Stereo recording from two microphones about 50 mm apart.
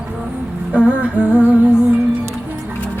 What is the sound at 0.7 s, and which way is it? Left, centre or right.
Music, right.